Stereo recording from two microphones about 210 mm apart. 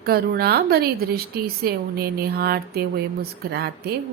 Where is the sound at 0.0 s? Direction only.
45° right (ahead or behind).